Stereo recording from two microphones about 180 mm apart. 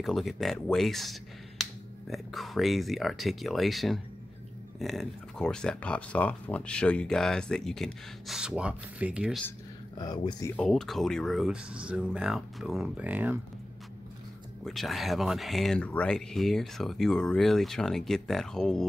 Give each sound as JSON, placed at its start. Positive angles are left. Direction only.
{"t": 0.0, "sound": "speech", "side_deg": 0}
{"t": 9.9, "sound": "speech", "side_deg": 25}
{"t": 10.5, "sound": "speech", "side_deg": 5}
{"t": 14.6, "sound": "speech", "side_deg": 0}